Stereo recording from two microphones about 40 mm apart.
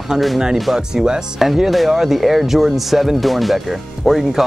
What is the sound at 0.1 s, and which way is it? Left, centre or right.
Speech, centre.